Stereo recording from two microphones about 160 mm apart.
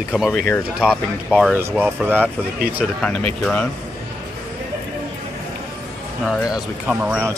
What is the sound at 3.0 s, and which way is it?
Speech, 5° left (ahead or behind).